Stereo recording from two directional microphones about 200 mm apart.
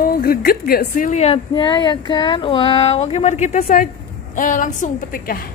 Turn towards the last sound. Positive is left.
turn(degrees=45)  # may be behind; listen again after turning